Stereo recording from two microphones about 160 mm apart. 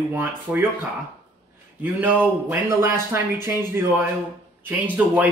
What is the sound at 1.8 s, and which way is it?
Speech, 10° right (ahead or behind).